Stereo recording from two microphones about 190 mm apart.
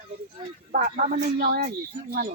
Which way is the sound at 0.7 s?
45° right (ahead or behind).